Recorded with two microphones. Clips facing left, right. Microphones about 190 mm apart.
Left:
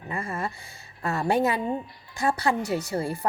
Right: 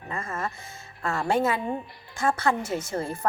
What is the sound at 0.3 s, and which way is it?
A woman's voice, 15° left (ahead or behind).